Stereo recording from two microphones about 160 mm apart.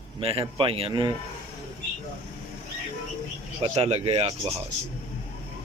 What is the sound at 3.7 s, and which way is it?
Speech, 40° right (ahead or behind).